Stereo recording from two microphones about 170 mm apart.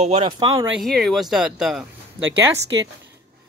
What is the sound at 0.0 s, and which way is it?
Speech, 35° right (ahead or behind).